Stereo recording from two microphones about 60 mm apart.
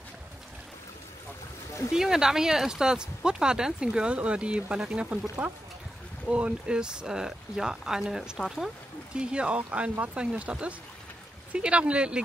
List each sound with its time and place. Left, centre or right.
1.9 s speech: centre
9.6 s speech: right